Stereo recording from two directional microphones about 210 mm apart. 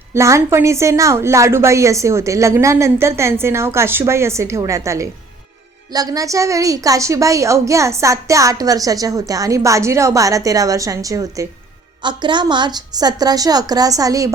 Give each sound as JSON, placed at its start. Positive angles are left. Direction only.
{"t": 0.1, "sound": "a woman's voice", "side_deg": -15}